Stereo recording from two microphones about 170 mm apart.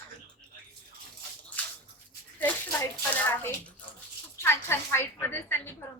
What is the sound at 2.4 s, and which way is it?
A woman's voice, 10° left (ahead or behind).